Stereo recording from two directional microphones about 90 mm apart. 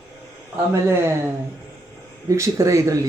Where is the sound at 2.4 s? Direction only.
35° right (ahead or behind).